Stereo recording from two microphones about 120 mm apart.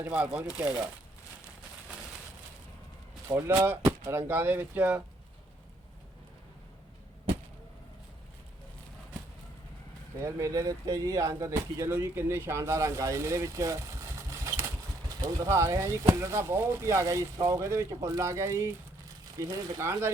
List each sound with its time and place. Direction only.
0.0 s speech: 10° right (ahead or behind)
3.2 s speech: 20° right (ahead or behind)
10.2 s speech: 25° right (ahead or behind)